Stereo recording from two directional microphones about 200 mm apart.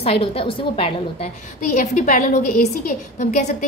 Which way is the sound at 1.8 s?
40° left (ahead or behind).